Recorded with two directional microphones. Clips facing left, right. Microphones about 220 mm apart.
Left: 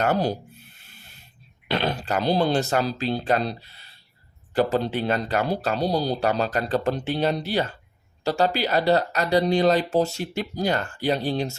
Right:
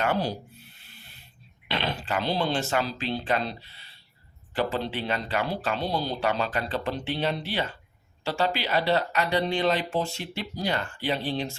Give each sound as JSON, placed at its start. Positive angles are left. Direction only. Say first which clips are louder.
{"t": 0.0, "sound": "speech", "louder": "left 4 dB", "side_deg": 45}
{"t": 1.6, "sound": "speech", "louder": "left 5 dB", "side_deg": 45}